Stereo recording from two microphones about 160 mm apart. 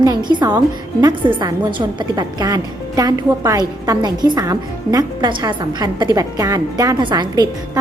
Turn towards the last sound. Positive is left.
turn(degrees=-25)  # may be behind; listen again after turning